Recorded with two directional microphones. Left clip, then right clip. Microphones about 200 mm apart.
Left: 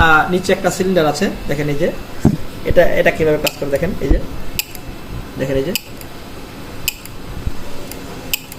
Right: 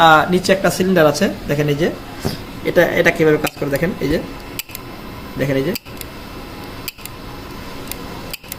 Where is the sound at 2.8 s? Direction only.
40° right (ahead or behind).